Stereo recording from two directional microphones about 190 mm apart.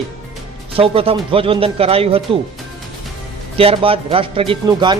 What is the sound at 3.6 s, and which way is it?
Speech, 30° right (ahead or behind).